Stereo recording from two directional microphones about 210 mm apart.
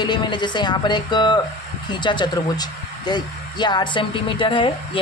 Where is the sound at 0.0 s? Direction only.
20° left (ahead or behind).